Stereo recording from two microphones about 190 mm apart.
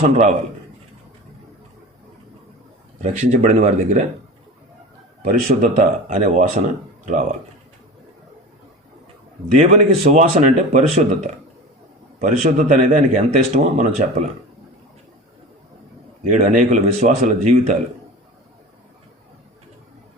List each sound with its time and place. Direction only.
0.0 s speech: 35° right (ahead or behind)
3.0 s speech: 35° right (ahead or behind)
5.2 s speech: 45° right (ahead or behind)
9.6 s speech: 40° right (ahead or behind)
16.3 s speech: 40° right (ahead or behind)